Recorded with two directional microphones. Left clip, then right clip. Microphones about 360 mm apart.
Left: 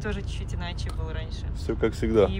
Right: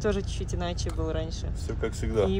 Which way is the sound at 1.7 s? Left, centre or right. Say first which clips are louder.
Left 7 dB; left.